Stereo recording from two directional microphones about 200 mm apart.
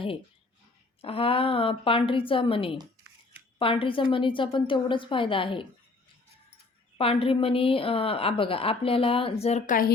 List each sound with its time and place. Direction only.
1.0 s a woman's voice: 30° left (ahead or behind)
7.0 s a woman's voice: 30° left (ahead or behind); by 9.9 s 45° left (ahead or behind)